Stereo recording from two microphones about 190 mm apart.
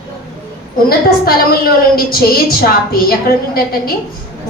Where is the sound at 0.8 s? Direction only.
50° left (ahead or behind).